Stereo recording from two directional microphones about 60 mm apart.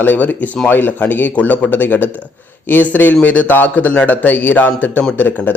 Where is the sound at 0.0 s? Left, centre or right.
Left.